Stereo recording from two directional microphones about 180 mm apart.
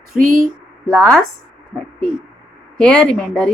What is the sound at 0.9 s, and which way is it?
Speech, 5° left (ahead or behind).